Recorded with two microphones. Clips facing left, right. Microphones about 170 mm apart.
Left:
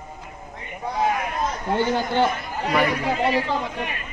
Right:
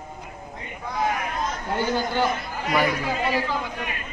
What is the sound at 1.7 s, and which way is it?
Speech, 25° left (ahead or behind).